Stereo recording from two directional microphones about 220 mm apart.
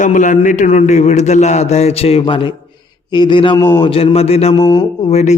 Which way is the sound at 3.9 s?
25° left (ahead or behind).